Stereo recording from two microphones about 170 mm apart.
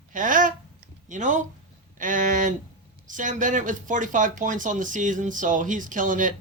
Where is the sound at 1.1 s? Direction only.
45° right (ahead or behind).